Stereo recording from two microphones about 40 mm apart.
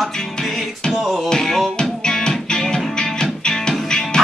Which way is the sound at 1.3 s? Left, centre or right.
Centre.